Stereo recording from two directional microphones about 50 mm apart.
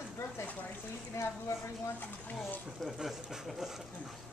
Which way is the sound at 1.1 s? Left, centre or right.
Left.